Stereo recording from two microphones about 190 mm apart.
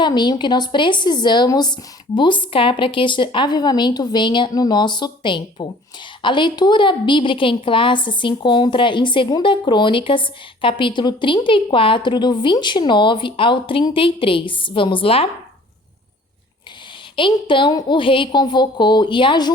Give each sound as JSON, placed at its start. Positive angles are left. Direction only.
{"t": 0.0, "sound": "a woman's voice", "side_deg": 25}
{"t": 17.2, "sound": "a woman's voice", "side_deg": 25}